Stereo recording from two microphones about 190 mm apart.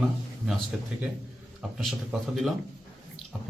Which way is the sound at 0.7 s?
Centre (ahead or behind).